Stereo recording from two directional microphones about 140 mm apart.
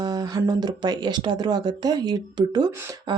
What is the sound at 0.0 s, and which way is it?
Speech, 30° right (ahead or behind).